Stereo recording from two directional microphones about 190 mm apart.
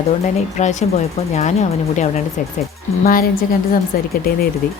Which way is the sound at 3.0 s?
50° left (ahead or behind).